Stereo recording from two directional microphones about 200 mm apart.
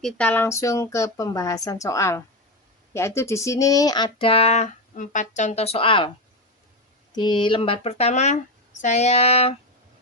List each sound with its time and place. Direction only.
0.0 s a woman's voice: 5° left (ahead or behind); by 6.1 s 25° left (ahead or behind)
7.1 s speech: 20° left (ahead or behind)